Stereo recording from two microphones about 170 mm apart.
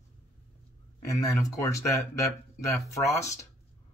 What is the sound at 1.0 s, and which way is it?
Speech, 20° left (ahead or behind).